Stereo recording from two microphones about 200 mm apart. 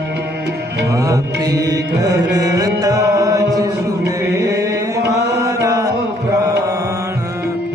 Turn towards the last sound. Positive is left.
turn(degrees=-15)  # may be behind; listen again after turning